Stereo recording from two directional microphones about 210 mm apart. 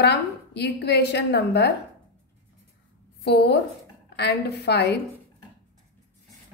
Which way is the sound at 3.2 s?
50° left (ahead or behind).